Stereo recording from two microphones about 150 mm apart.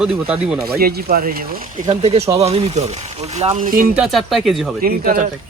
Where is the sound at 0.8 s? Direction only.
90° right; by 3.7 s 45° right (ahead or behind).